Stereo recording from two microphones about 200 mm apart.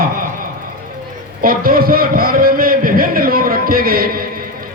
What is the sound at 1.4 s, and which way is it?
Music, 45° right (ahead or behind).